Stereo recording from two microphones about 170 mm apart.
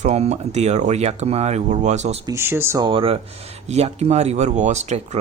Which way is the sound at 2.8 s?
30° right (ahead or behind).